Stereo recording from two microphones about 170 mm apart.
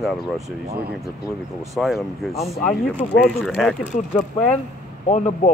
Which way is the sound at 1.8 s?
Centre (ahead or behind).